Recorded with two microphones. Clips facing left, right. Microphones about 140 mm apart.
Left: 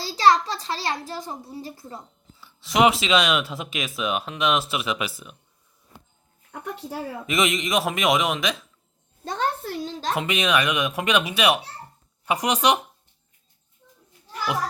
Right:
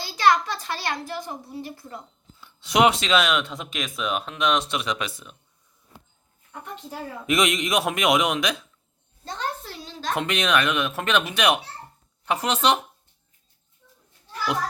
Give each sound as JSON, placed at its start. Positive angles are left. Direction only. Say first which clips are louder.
{"t": 0.0, "sound": "a child's voice", "louder": "left 2 dB", "side_deg": 30}
{"t": 2.4, "sound": "speech", "louder": "even", "side_deg": 0}
{"t": 6.5, "sound": "a woman's voice", "louder": "left 4 dB", "side_deg": 70}
{"t": 7.3, "sound": "speech", "louder": "right 1 dB", "side_deg": 0}
{"t": 9.2, "sound": "a sound", "louder": "left 5 dB", "side_deg": 55}
{"t": 10.2, "sound": "speech", "louder": "even", "side_deg": 5}
{"t": 13.8, "sound": "children playing", "louder": "left 2 dB", "side_deg": 30}